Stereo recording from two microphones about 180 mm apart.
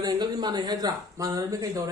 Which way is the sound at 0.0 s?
20° right (ahead or behind).